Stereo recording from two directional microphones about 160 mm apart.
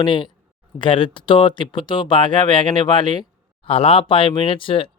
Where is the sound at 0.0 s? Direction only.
30° left (ahead or behind).